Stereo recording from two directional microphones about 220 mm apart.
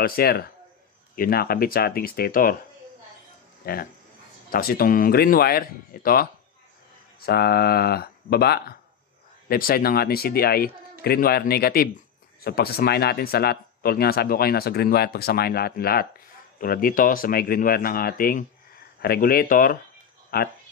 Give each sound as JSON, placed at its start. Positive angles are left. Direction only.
{"t": 0.0, "sound": "speech", "side_deg": 45}
{"t": 3.6, "sound": "speech", "side_deg": 45}